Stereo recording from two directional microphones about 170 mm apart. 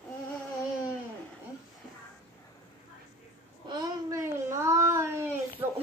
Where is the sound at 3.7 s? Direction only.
20° right (ahead or behind).